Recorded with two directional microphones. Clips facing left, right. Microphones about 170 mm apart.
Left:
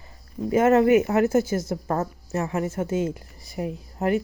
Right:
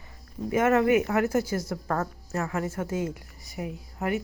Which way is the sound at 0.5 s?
30° left (ahead or behind).